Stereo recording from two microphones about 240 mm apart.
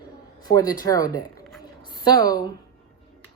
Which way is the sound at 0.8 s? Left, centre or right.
Centre.